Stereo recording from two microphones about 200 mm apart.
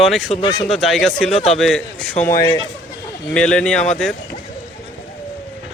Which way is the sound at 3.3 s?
5° left (ahead or behind).